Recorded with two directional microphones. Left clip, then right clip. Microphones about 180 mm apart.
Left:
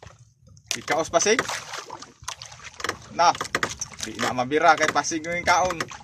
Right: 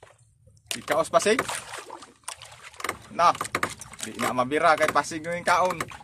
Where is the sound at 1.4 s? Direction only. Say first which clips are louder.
Left 2 dB; 25° left (ahead or behind).